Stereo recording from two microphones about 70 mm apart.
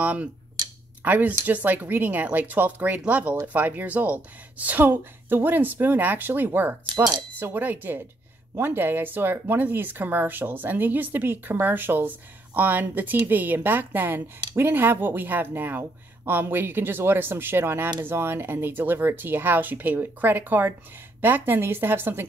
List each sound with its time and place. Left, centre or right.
0.0 s speech: right